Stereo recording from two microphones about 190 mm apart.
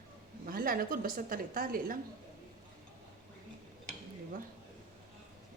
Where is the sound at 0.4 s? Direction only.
50° right (ahead or behind).